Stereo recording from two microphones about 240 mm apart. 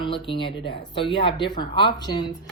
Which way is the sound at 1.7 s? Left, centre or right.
Centre.